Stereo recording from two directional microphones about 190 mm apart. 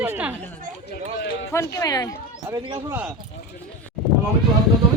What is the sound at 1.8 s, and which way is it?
Speech, 20° left (ahead or behind).